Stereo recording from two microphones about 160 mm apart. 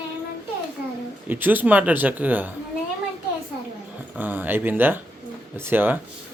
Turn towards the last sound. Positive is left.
turn(degrees=-10)  # may be behind; listen again after turning